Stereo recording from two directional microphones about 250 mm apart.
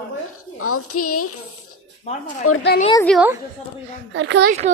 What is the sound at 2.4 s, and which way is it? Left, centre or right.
Speech, left.